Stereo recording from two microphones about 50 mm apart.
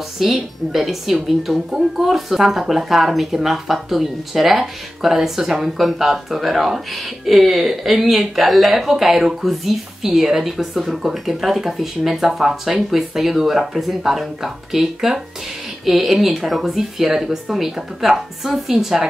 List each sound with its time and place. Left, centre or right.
0.2 s a woman's voice: centre